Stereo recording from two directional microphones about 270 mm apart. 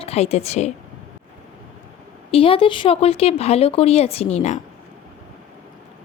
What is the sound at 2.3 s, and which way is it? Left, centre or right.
Speech, centre.